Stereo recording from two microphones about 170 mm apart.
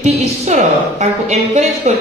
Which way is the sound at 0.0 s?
40° right (ahead or behind).